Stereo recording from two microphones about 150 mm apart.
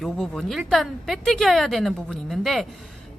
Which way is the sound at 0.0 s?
Centre (ahead or behind).